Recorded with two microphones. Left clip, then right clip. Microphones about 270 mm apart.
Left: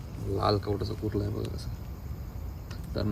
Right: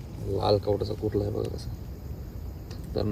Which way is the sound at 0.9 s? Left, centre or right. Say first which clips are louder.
Right 4 dB; centre.